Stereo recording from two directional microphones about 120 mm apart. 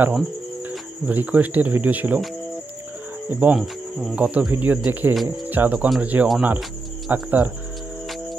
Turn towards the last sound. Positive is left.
turn(degrees=-15)  # may be behind; listen again after turning